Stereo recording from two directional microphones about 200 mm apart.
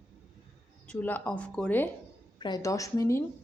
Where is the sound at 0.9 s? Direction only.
10° left (ahead or behind).